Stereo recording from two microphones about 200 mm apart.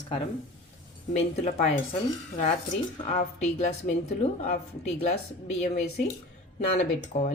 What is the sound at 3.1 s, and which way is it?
A woman's voice, 35° left (ahead or behind).